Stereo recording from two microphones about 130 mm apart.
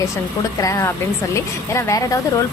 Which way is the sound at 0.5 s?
25° left (ahead or behind).